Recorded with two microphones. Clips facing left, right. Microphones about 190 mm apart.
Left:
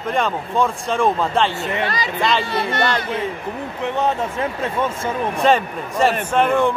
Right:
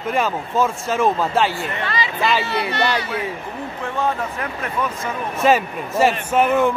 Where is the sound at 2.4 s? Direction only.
50° left (ahead or behind).